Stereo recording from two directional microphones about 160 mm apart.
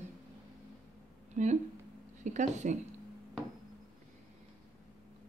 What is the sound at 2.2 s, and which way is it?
Speech, 50° right (ahead or behind).